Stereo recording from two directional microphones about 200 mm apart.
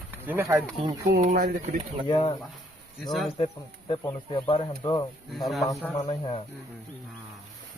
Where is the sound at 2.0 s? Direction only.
25° left (ahead or behind).